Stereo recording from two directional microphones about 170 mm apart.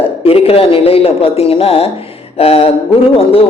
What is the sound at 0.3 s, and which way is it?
Speech, 35° left (ahead or behind).